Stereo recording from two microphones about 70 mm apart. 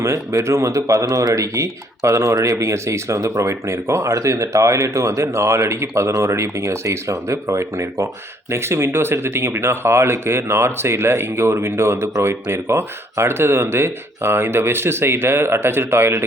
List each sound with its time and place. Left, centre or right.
0.0 s speech: right